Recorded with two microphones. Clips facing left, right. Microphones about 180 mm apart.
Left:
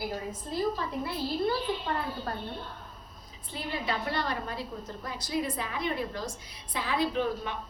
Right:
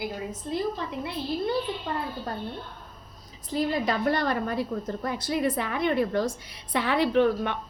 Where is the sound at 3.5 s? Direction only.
40° right (ahead or behind).